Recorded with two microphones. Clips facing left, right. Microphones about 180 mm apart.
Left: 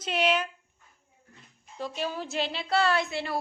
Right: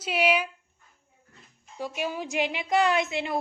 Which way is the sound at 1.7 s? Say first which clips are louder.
Right 1 dB; 10° right (ahead or behind).